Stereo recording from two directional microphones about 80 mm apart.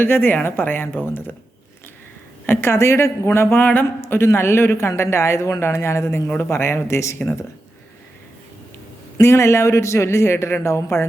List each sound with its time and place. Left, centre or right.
0.0 s speech: left
2.5 s a man's voice: left
4.2 s a man's voice: left
9.2 s a man's voice: left